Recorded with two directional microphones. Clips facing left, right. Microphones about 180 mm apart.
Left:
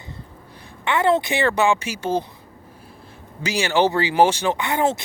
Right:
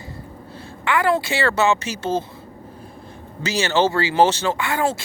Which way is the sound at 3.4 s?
10° left (ahead or behind).